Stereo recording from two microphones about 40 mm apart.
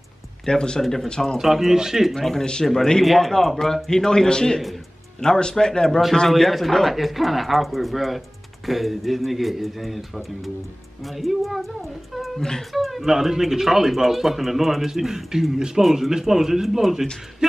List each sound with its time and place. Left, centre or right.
0.5 s speech: centre
1.4 s speech: centre
2.1 s speech: centre
6.2 s speech: centre